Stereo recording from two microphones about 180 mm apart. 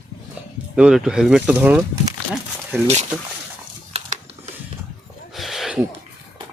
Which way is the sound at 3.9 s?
35° right (ahead or behind).